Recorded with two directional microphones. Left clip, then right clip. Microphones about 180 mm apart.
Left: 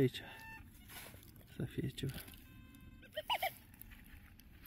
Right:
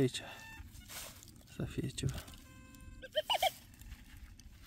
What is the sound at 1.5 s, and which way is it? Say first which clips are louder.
Speech: right 2 dB; 10° right (ahead or behind).